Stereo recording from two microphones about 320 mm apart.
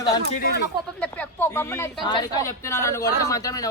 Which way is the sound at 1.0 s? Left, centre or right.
Centre.